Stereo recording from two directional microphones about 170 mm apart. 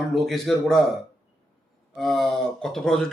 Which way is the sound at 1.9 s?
Centre (ahead or behind).